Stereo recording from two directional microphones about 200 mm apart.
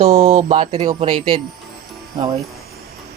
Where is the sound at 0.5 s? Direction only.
25° right (ahead or behind).